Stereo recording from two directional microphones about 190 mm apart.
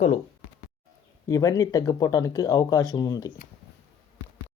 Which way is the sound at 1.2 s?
15° left (ahead or behind).